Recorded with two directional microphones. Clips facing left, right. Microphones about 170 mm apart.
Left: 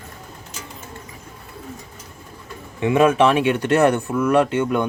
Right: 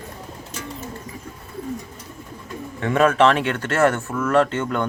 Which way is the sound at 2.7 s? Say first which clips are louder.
Left 2 dB; 15° left (ahead or behind).